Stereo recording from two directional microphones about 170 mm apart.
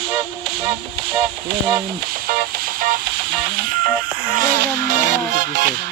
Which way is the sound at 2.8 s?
55° right (ahead or behind).